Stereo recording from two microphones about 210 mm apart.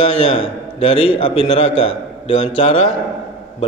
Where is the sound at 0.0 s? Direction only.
30° left (ahead or behind).